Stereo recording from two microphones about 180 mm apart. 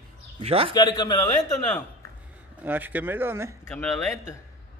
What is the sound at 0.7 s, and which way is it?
Speech, 25° left (ahead or behind).